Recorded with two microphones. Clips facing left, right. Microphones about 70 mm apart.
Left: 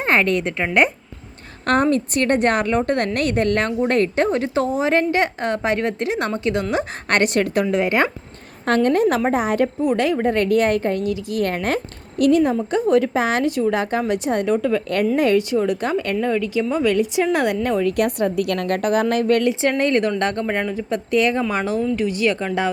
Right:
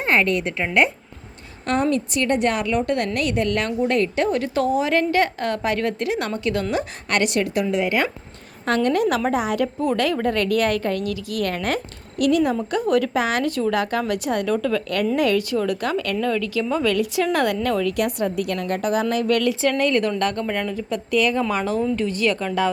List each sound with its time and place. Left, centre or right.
0.0 s a woman's voice: left
1.6 s a woman's voice: left
7.1 s a woman's voice: left
9.8 s a woman's voice: left
17.9 s a woman's voice: left
19.3 s a woman's voice: left
21.5 s a woman's voice: centre